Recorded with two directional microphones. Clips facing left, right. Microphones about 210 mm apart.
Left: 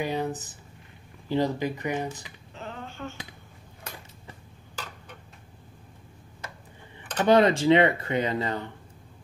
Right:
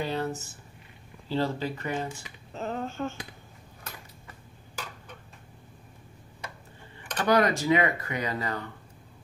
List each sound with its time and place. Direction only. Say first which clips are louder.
0.0 s speech: left 2 dB; 15° left (ahead or behind)
2.5 s finger snapping: right 7 dB; 40° right (ahead or behind)
7.0 s speech: left 4 dB; 25° left (ahead or behind)